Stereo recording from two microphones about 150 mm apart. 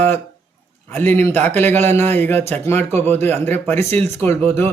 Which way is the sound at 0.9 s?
15° left (ahead or behind).